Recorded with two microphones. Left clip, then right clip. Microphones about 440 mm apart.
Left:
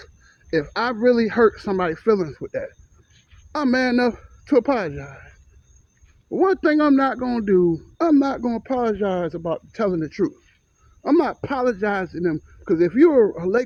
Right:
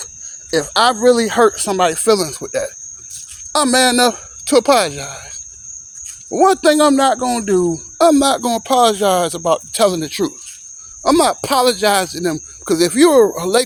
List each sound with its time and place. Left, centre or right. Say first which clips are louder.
0.5 s speech: right 8 dB; left
6.3 s speech: right 7 dB; left